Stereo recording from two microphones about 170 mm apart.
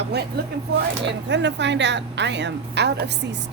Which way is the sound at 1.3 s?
90° right.